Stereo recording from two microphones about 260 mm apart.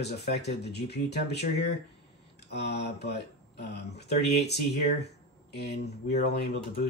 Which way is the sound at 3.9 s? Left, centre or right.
Left.